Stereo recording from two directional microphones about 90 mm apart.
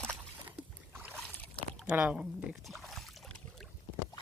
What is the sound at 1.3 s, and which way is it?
Rowboat, 20° left (ahead or behind).